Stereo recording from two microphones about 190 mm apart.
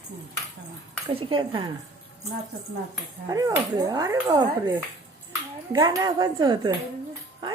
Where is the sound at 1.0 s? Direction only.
25° right (ahead or behind).